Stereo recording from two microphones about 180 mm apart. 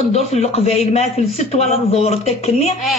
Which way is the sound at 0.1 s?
35° left (ahead or behind).